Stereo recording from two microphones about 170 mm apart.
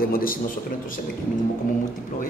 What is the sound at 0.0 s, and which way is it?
Speech, 60° left (ahead or behind).